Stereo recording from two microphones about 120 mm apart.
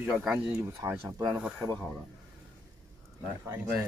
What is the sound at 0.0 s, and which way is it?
Speech, 10° right (ahead or behind).